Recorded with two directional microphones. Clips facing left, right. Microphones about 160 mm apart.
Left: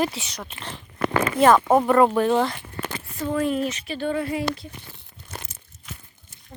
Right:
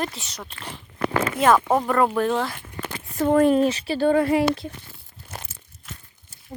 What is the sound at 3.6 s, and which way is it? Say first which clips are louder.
Speech: right 6 dB; 30° right (ahead or behind).